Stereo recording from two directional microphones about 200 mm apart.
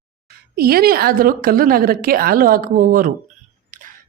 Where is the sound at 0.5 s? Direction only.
50° right (ahead or behind).